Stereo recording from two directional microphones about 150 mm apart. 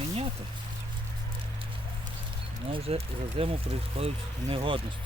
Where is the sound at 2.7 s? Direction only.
40° right (ahead or behind).